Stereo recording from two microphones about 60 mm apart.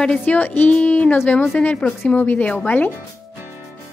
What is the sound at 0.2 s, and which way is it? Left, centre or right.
Speech, left.